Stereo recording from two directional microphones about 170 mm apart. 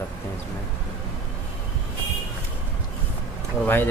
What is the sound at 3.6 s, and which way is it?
Speech, 10° left (ahead or behind).